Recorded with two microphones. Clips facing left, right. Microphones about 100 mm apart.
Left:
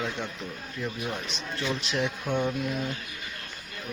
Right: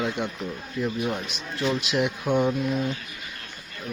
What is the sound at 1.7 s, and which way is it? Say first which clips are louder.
Speech: right 4 dB; 5° right (ahead or behind).